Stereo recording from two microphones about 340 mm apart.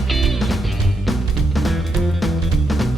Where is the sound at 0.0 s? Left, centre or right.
Centre.